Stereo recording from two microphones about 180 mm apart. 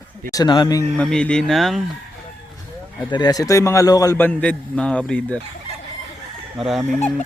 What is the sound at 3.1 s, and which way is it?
A man's voice, 20° left (ahead or behind).